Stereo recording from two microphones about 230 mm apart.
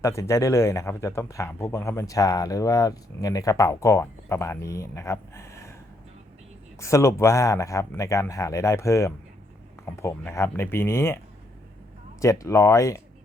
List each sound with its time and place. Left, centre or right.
0.0 s speech: centre
6.7 s speech: centre
12.2 s speech: centre